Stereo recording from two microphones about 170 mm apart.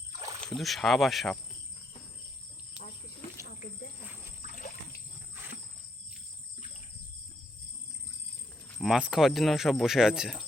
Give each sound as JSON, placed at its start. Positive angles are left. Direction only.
{"t": 0.5, "sound": "speech", "side_deg": 0}
{"t": 4.4, "sound": "splash", "side_deg": 50}
{"t": 8.8, "sound": "speech", "side_deg": -5}